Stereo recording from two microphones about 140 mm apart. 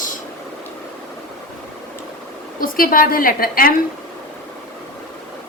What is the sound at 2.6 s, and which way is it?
A woman's voice, 85° left.